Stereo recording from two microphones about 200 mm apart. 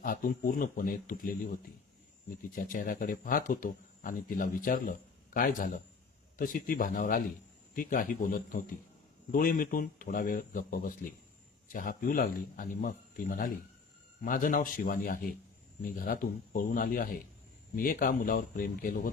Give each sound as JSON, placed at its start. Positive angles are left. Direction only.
{"t": 0.0, "sound": "speech", "side_deg": 45}
{"t": 2.6, "sound": "speech", "side_deg": 45}